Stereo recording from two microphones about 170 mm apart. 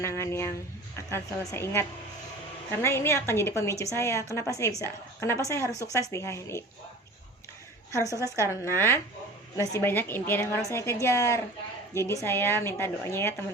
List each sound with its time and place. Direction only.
0.0 s a woman's voice: 15° left (ahead or behind)
8.2 s a woman's voice: 15° left (ahead or behind)